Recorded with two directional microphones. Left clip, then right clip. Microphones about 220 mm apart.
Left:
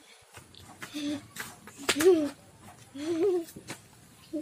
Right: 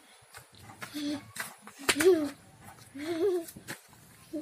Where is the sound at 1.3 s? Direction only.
20° right (ahead or behind).